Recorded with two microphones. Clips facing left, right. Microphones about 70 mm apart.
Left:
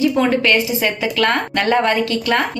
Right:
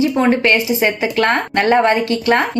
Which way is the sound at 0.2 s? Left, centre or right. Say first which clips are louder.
Right 1 dB; right.